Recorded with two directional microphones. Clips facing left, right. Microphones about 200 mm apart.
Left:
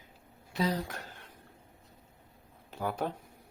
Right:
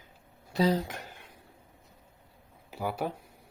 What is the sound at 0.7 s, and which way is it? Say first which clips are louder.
Speech: right 4 dB; 20° right (ahead or behind).